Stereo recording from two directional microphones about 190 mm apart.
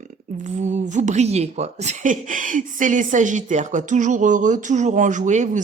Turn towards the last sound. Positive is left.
turn(degrees=-40)  # may be behind; listen again after turning